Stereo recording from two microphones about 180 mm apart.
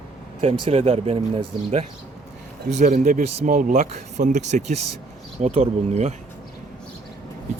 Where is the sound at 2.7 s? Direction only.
45° right (ahead or behind).